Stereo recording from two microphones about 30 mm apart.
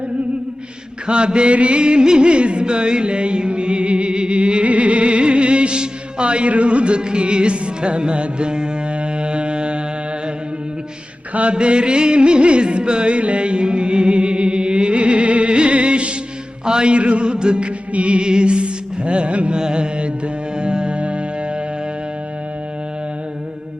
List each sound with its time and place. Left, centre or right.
1.0 s music: right
11.5 s music: right
19.5 s music: right